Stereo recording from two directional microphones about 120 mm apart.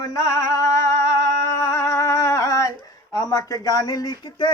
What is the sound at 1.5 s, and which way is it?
Humming, 25° left (ahead or behind).